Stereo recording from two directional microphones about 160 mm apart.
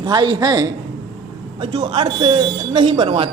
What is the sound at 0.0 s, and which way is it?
A woman's voice, 25° right (ahead or behind).